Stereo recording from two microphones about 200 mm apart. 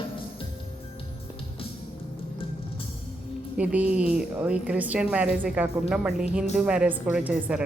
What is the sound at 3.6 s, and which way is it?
A woman's voice, 5° right (ahead or behind).